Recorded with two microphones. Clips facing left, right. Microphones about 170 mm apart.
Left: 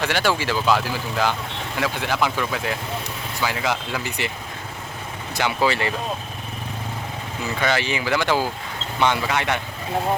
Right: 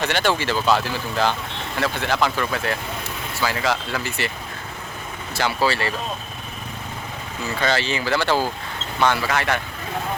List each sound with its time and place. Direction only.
0.0 s speech: 10° left (ahead or behind)
5.3 s speech: 15° left (ahead or behind)
7.4 s speech: 15° left (ahead or behind)